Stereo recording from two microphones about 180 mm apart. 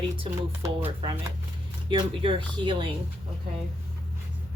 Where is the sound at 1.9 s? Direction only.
30° right (ahead or behind).